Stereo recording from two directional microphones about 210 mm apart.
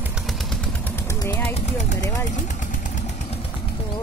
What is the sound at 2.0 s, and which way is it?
Speech, 15° left (ahead or behind).